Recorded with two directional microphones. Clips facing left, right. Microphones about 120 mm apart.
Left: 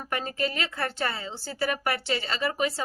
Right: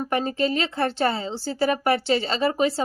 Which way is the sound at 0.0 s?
30° right (ahead or behind).